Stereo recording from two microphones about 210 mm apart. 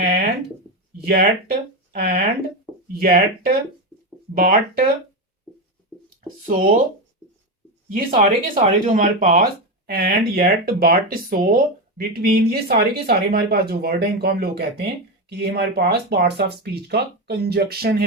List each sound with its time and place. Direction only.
0.0 s a sound: 50° right (ahead or behind)
1.0 s speech: 50° right (ahead or behind)
6.5 s speech: 40° right (ahead or behind)
8.2 s speech: 35° right (ahead or behind)